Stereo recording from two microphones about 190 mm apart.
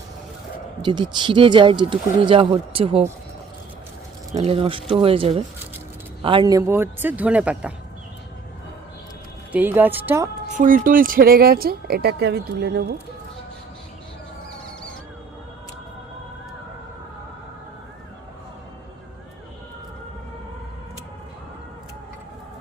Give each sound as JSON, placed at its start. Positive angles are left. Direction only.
{"t": 0.8, "sound": "speech", "side_deg": -25}
{"t": 4.3, "sound": "a man's voice", "side_deg": -35}
{"t": 9.5, "sound": "a man's voice", "side_deg": -10}
{"t": 10.6, "sound": "speech", "side_deg": -45}